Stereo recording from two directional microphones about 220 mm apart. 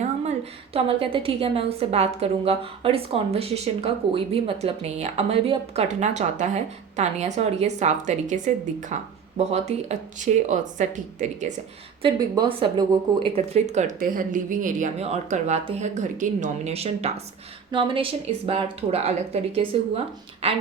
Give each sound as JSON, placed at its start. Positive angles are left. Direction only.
{"t": 0.0, "sound": "a woman's voice", "side_deg": -30}
{"t": 12.0, "sound": "a woman's voice", "side_deg": -20}